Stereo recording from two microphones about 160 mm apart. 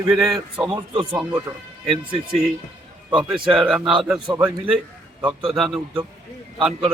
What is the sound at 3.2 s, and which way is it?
A man's voice, 5° right (ahead or behind).